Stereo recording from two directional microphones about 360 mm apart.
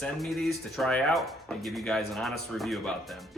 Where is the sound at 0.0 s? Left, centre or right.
Centre.